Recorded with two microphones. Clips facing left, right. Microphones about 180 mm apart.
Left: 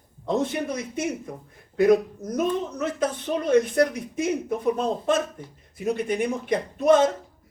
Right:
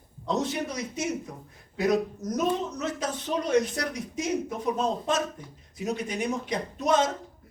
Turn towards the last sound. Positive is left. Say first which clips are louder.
# left 6 dB
turn(degrees=55)  # may be behind; listen again after turning